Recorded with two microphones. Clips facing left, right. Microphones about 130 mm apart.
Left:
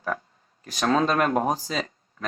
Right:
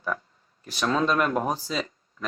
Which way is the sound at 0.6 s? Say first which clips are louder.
Left 2 dB; 45° left (ahead or behind).